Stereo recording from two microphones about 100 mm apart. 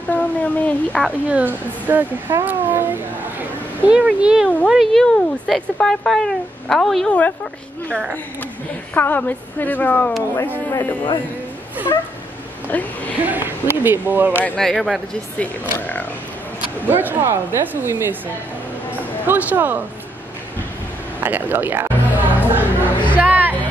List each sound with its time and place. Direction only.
0.1 s speech: 15° left (ahead or behind)
1.3 s speech: 20° right (ahead or behind); by 7.2 s 5° left (ahead or behind)
8.9 s a woman's voice: 20° left (ahead or behind)
10.7 s a woman's voice: 25° left (ahead or behind)
12.6 s a woman's voice: 15° left (ahead or behind)
13.2 s speech: 20° right (ahead or behind)
14.6 s speech: 5° left (ahead or behind)
16.8 s speech: 20° right (ahead or behind)
19.2 s speech: 15° right (ahead or behind)
21.2 s speech: 20° right (ahead or behind)
23.1 s music: 20° right (ahead or behind)